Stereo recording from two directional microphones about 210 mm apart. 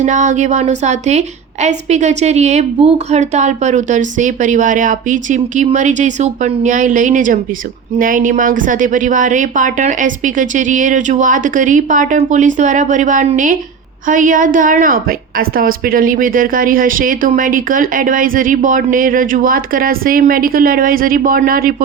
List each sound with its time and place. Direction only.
0.0 s a woman's voice: 35° right (ahead or behind)